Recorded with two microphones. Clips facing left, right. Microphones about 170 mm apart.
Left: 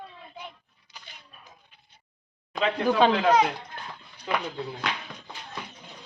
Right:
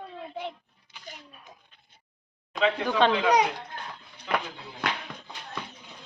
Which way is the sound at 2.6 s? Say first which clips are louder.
Left 1 dB; 5° left (ahead or behind).